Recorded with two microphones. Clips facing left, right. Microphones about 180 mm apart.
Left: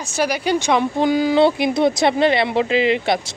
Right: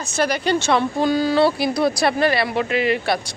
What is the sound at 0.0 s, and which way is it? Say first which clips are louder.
Speech: even; 10° left (ahead or behind).